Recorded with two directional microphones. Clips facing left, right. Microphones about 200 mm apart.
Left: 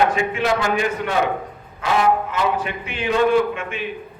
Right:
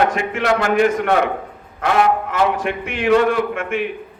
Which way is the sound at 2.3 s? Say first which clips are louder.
Right 3 dB; 75° right (ahead or behind).